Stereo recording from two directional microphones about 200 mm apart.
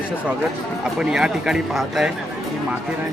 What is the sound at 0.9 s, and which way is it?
Speech, 5° right (ahead or behind).